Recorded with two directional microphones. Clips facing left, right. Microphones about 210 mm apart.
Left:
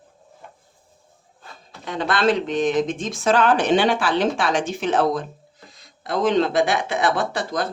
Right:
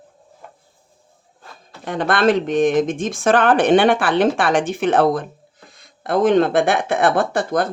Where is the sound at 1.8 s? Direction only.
55° right (ahead or behind).